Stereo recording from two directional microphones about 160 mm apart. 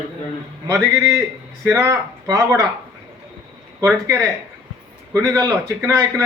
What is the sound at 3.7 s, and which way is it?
A man's voice, 20° right (ahead or behind).